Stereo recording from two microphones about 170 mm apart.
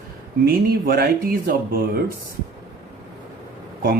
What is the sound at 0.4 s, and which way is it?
Speech, 60° right (ahead or behind).